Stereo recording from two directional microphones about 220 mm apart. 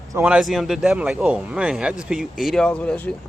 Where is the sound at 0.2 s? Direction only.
Centre (ahead or behind).